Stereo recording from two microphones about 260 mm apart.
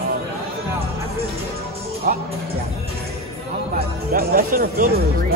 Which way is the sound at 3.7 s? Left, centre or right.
Right.